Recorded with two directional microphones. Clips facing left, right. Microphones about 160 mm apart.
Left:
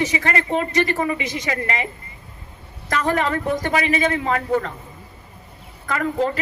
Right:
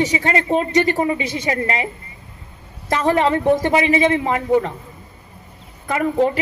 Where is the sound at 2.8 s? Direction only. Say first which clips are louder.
Right 4 dB; 25° right (ahead or behind).